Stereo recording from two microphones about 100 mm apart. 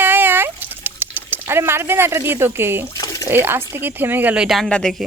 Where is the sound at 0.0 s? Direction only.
20° right (ahead or behind).